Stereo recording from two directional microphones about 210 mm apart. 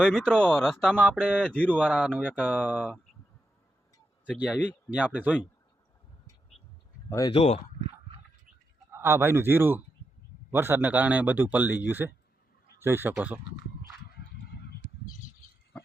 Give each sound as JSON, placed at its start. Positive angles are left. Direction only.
{"t": 0.0, "sound": "speech", "side_deg": 5}
{"t": 4.4, "sound": "speech", "side_deg": -5}
{"t": 7.1, "sound": "speech", "side_deg": 15}
{"t": 7.3, "sound": "speech", "side_deg": 30}
{"t": 8.9, "sound": "speech", "side_deg": -10}
{"t": 14.2, "sound": "a sound", "side_deg": 50}